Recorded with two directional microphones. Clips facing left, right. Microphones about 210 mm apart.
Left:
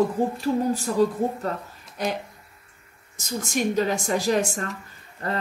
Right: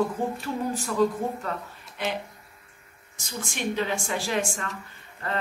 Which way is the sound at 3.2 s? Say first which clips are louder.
Left 6 dB; 40° left (ahead or behind).